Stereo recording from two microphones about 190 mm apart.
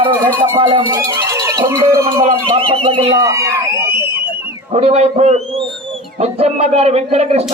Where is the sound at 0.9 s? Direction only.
15° right (ahead or behind).